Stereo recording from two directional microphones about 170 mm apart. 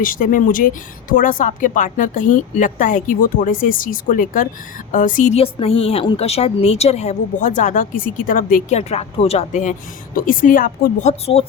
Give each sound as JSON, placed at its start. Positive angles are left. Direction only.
{"t": 0.0, "sound": "speech", "side_deg": 55}
{"t": 5.4, "sound": "a woman's voice", "side_deg": 35}